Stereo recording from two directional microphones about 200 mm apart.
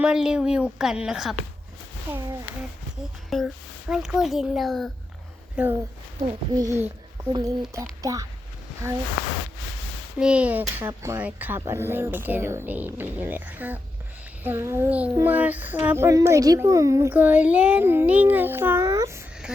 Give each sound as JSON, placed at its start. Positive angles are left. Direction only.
{"t": 0.0, "sound": "a child's voice", "side_deg": -5}
{"t": 2.1, "sound": "child singing", "side_deg": -10}
{"t": 3.2, "sound": "a child's voice", "side_deg": 0}
{"t": 6.2, "sound": "child singing", "side_deg": -20}
{"t": 10.2, "sound": "child singing", "side_deg": -5}